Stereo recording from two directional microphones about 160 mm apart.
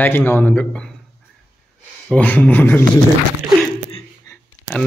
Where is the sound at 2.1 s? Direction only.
10° left (ahead or behind).